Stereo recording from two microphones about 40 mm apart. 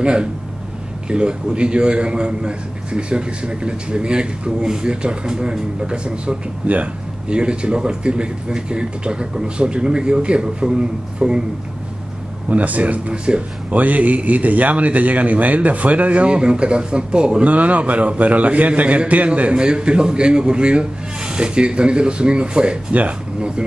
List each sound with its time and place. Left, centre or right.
0.0 s a man's voice: right
12.4 s speech: right
13.1 s a man's voice: right
13.7 s speech: right
17.5 s a man's voice: right